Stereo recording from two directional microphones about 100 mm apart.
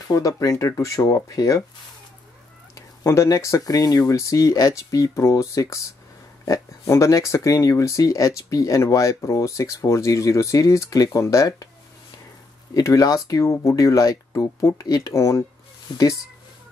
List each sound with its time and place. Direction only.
0.1 s speech: 35° left (ahead or behind)
2.7 s speech: 30° left (ahead or behind)
12.7 s speech: 35° left (ahead or behind)